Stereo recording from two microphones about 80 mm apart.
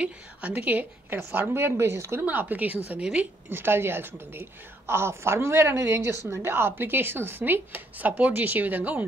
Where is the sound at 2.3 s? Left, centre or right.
Right.